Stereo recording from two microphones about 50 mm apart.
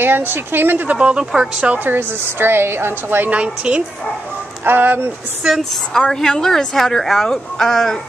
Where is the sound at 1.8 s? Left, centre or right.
Right.